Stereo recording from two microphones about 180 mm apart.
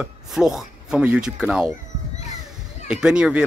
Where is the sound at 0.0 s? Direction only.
5° right (ahead or behind).